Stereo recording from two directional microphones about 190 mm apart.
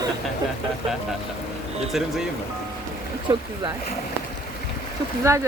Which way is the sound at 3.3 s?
20° right (ahead or behind).